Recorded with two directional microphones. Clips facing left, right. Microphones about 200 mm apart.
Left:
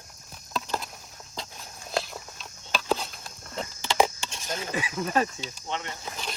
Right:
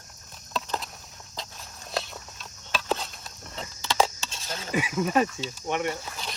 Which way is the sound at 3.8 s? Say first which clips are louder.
Left 1 dB; 15° left (ahead or behind).